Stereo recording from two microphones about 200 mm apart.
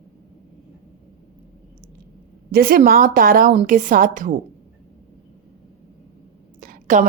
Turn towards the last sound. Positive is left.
turn(degrees=-40)  # may be behind; listen again after turning